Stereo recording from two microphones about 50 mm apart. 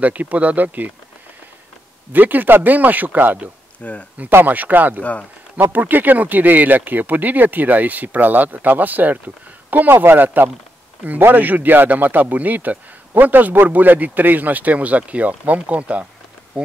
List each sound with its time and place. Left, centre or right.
0.0 s a man's voice: right
2.1 s a man's voice: right
3.8 s speech: left
4.5 s a man's voice: right